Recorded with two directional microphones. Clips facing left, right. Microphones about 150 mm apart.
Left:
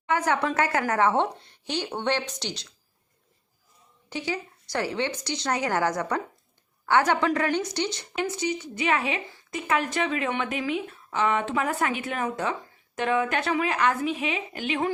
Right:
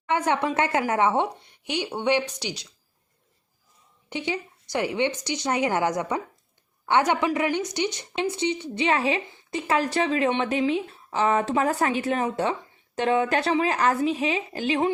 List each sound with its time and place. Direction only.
0.1 s speech: 20° right (ahead or behind)
4.1 s a woman's voice: 20° right (ahead or behind)